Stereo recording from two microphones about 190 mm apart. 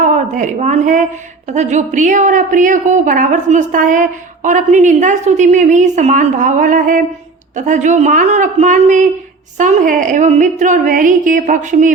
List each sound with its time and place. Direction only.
0.0 s a woman's voice: 40° right (ahead or behind)